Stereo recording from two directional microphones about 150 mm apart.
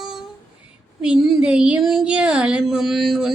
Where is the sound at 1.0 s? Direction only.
5° right (ahead or behind).